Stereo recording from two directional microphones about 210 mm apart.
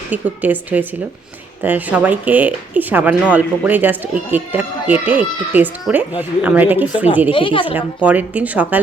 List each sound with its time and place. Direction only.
0.1 s speech: 5° right (ahead or behind)
7.3 s speech: 25° left (ahead or behind)
7.8 s speech: 5° right (ahead or behind)